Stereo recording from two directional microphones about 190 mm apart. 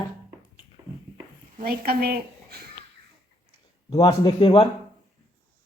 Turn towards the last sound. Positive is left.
turn(degrees=25)  # may be behind; listen again after turning